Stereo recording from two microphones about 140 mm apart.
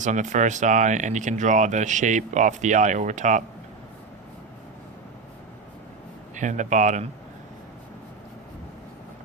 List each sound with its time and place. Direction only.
0.0 s speech: 60° right (ahead or behind)
6.3 s speech: 60° right (ahead or behind)